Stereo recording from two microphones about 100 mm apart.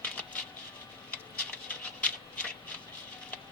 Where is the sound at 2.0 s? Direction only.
15° left (ahead or behind).